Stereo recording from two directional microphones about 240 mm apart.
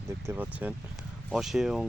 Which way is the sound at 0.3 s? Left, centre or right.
Centre.